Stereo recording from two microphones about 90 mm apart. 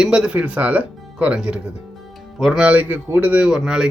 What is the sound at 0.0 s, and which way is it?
Speech, 5° right (ahead or behind).